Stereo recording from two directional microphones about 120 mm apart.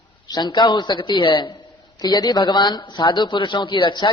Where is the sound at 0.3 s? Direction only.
35° left (ahead or behind).